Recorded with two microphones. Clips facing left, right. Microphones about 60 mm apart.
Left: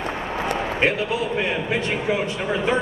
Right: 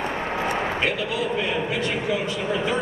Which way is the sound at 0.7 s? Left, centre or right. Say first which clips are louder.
Left 3 dB; left.